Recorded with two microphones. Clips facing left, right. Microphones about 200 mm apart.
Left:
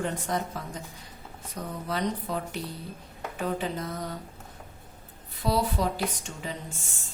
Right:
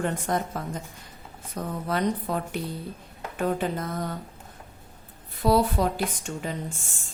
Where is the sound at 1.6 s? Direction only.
50° right (ahead or behind).